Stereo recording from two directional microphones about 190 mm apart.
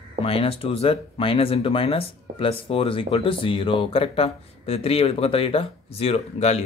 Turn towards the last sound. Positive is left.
turn(degrees=35)  # may be behind; listen again after turning